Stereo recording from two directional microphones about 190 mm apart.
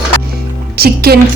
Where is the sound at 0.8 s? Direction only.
55° right (ahead or behind).